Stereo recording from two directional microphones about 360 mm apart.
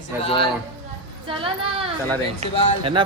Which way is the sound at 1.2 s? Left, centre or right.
Centre.